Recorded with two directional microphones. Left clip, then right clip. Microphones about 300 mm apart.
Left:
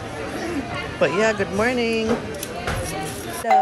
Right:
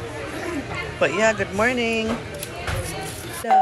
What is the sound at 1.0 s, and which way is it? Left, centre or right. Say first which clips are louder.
Speech: even; centre.